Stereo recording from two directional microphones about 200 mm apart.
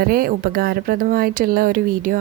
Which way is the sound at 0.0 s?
45° right (ahead or behind).